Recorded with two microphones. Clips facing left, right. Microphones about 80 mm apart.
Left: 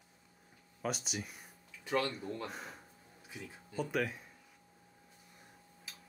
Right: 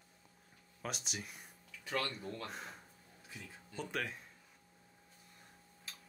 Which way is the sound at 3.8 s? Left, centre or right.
Centre.